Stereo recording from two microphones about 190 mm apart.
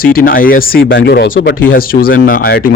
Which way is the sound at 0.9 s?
65° left (ahead or behind).